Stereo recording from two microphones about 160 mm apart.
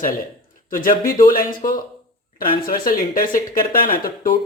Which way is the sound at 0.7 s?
60° left (ahead or behind).